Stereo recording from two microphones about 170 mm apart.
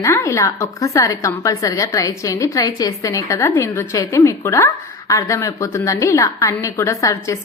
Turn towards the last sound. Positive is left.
turn(degrees=20)  # may be behind; listen again after turning